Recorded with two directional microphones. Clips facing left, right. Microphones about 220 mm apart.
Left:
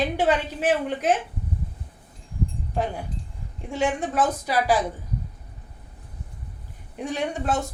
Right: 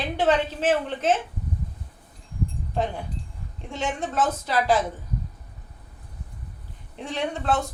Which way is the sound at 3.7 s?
15° left (ahead or behind).